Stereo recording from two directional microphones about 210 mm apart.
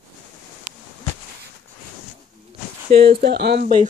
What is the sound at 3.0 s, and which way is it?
Speech, 45° right (ahead or behind).